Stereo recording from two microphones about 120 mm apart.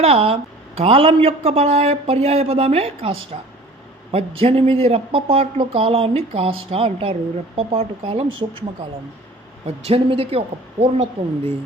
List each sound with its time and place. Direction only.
0.0 s speech: 55° right (ahead or behind)
9.6 s speech: 55° right (ahead or behind)